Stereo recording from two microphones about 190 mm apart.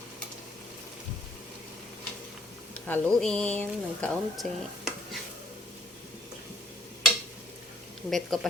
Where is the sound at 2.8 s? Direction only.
5° left (ahead or behind).